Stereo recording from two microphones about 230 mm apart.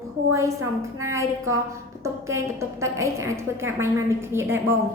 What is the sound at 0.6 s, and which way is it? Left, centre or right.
A woman's voice, centre.